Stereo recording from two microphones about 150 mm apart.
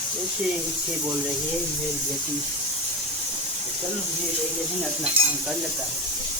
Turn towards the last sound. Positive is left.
turn(degrees=-40)  # may be behind; listen again after turning